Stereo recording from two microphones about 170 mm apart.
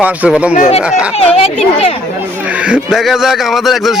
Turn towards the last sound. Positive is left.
turn(degrees=0)  # may be behind; listen again after turning